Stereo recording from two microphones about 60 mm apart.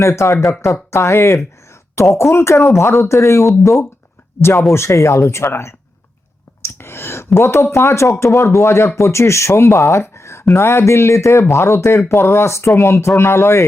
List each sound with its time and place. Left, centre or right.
0.0 s speech: left
0.4 s speech: centre
0.9 s speech: left
6.6 s a sound: left
7.3 s speech: left